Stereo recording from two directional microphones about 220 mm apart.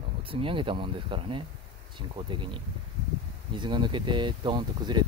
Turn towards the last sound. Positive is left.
turn(degrees=-20)  # may be behind; listen again after turning